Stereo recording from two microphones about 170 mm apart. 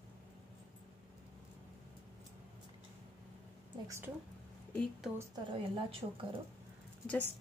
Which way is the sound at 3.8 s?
15° right (ahead or behind).